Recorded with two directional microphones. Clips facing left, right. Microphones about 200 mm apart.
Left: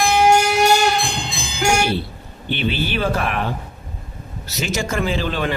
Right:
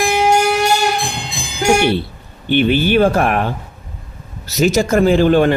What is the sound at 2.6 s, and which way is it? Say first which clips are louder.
Speech: right 10 dB; 50° right (ahead or behind).